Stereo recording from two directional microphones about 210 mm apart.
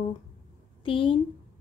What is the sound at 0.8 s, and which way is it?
Speech, 25° left (ahead or behind).